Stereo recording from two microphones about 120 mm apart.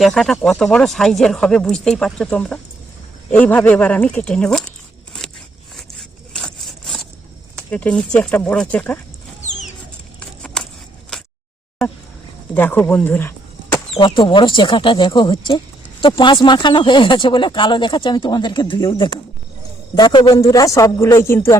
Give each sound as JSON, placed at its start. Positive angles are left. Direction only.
{"t": 0.0, "sound": "speech", "side_deg": 0}
{"t": 5.7, "sound": "sawing", "side_deg": 5}
{"t": 7.7, "sound": "speech", "side_deg": 10}
{"t": 10.2, "sound": "a sound", "side_deg": 5}
{"t": 12.5, "sound": "speech", "side_deg": 15}
{"t": 13.9, "sound": "speech", "side_deg": 45}
{"t": 20.3, "sound": "speech", "side_deg": 30}